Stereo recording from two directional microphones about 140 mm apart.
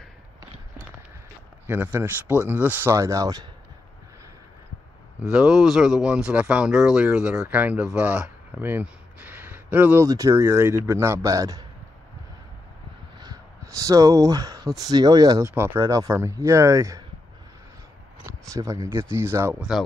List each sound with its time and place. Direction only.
1.7 s speech: 15° right (ahead or behind)
5.2 s speech: 5° right (ahead or behind)
10.0 s speech: 25° right (ahead or behind)
13.7 s speech: 25° right (ahead or behind)
18.5 s speech: 25° right (ahead or behind)